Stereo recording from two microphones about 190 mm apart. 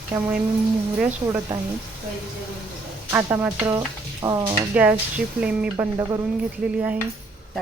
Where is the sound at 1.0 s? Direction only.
5° right (ahead or behind).